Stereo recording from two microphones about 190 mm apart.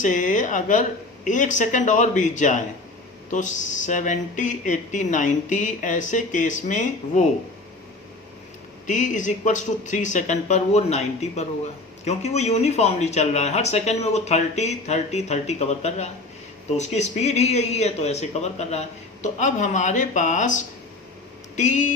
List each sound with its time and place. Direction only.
0.0 s speech: 40° left (ahead or behind)
8.9 s speech: 40° left (ahead or behind)